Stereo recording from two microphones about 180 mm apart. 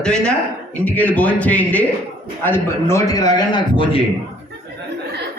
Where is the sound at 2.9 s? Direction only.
20° left (ahead or behind).